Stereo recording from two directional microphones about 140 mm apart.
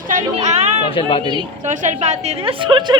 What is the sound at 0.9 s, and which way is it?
Speech, 40° left (ahead or behind).